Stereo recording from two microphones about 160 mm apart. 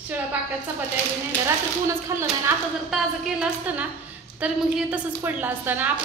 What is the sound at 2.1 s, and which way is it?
Speech, 20° right (ahead or behind).